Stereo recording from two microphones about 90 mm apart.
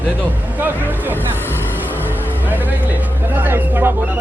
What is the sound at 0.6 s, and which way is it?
Music, 20° right (ahead or behind).